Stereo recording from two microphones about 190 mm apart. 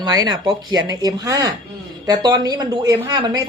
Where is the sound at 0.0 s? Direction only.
20° right (ahead or behind).